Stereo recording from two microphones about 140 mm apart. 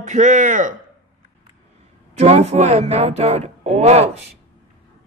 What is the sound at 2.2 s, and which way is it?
Speech, 50° right (ahead or behind).